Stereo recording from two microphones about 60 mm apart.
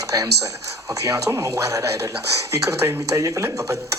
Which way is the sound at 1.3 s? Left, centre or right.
Right.